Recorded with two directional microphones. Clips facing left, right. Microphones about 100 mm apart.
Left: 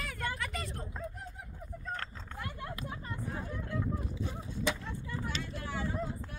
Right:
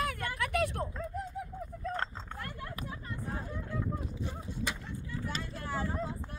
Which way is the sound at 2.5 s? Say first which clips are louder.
Left 1 dB; 20° left (ahead or behind).